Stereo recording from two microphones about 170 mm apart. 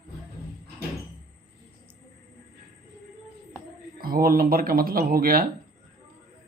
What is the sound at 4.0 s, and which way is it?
Speech, 60° right (ahead or behind).